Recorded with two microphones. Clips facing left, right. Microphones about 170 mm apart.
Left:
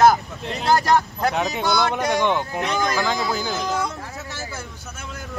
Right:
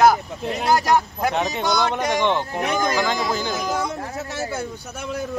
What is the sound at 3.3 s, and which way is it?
Speech, centre (ahead or behind).